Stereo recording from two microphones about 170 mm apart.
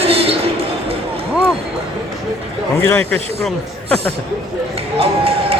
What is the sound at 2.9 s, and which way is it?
Speech, 10° left (ahead or behind).